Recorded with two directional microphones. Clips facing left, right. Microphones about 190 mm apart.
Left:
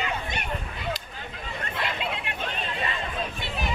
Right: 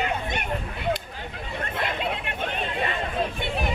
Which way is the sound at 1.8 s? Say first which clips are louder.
Right 2 dB; 50° right (ahead or behind).